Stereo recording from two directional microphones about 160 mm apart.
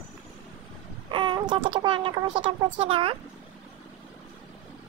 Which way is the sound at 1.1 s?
30° right (ahead or behind).